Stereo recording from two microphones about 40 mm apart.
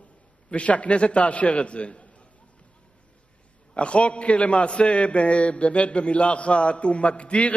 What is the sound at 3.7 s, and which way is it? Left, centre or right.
A man's voice, left.